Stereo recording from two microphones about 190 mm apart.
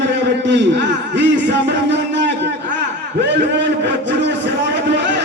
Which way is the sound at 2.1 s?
65° right (ahead or behind).